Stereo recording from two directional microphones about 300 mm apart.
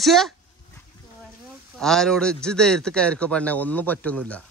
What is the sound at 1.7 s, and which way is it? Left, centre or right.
A man's voice, centre.